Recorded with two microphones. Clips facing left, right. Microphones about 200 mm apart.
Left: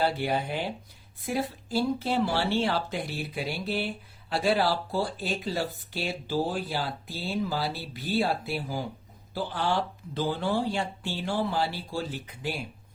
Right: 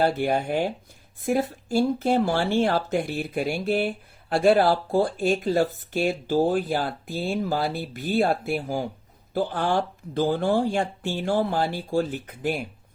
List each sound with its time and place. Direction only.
0.0 s speech: 50° right (ahead or behind)